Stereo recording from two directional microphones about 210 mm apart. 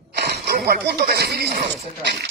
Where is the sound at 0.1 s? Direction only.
50° right (ahead or behind).